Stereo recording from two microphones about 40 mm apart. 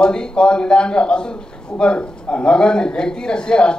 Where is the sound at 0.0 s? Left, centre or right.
Centre.